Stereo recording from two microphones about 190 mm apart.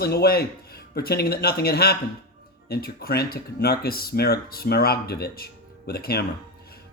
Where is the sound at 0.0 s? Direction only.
55° left (ahead or behind).